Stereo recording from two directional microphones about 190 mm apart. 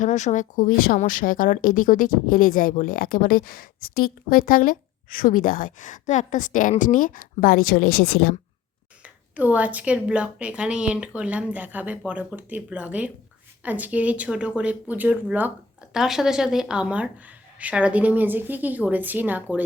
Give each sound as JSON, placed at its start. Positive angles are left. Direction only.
{"t": 0.0, "sound": "speech", "side_deg": 40}
{"t": 7.9, "sound": "speech", "side_deg": 90}
{"t": 9.3, "sound": "a woman's voice", "side_deg": -10}